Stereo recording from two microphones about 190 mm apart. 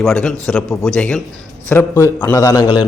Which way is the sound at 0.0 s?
5° left (ahead or behind).